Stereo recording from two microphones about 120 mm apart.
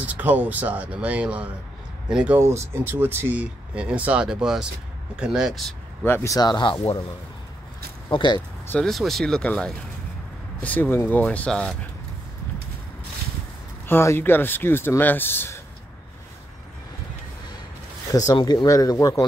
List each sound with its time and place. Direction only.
0.0 s speech: 15° right (ahead or behind)
2.3 s speech: 20° right (ahead or behind); by 5.8 s 5° right (ahead or behind)
6.0 s speech: 20° left (ahead or behind); by 6.8 s 40° left (ahead or behind)
8.1 s speech: 40° left (ahead or behind)
8.6 s speech: 5° left (ahead or behind)
13.8 s speech: 20° left (ahead or behind)
18.1 s speech: 30° left (ahead or behind)